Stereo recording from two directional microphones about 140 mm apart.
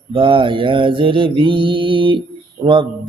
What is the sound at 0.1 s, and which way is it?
Mantra, 35° right (ahead or behind).